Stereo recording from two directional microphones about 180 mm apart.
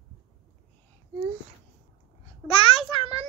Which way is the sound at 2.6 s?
30° left (ahead or behind).